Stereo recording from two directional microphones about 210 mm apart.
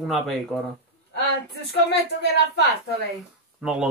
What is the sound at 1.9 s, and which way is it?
Speech, 55° left (ahead or behind).